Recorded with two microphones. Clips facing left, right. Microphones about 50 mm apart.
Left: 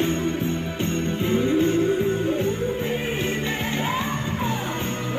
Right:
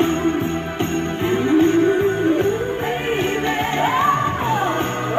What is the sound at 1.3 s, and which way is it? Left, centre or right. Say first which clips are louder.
Music: right 5 dB; right.